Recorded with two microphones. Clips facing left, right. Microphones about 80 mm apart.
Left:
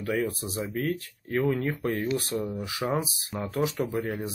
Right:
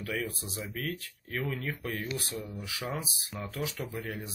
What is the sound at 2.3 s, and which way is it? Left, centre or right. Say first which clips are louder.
Speech: left 9 dB; centre.